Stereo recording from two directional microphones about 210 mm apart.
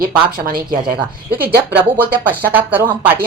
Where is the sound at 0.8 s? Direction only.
20° right (ahead or behind).